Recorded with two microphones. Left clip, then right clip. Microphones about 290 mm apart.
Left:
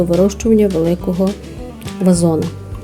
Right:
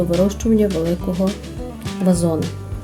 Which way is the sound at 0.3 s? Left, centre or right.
Left.